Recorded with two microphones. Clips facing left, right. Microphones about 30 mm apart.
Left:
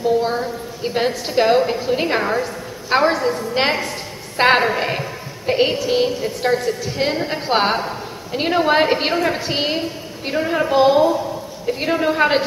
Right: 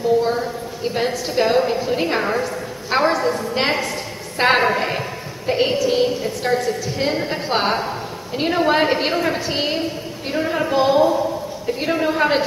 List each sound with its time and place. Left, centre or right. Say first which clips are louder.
0.2 s a woman's voice: even; centre